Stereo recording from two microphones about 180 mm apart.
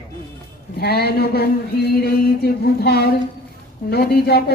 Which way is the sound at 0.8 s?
60° left (ahead or behind).